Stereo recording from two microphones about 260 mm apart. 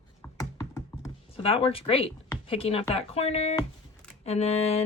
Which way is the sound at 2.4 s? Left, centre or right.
Left.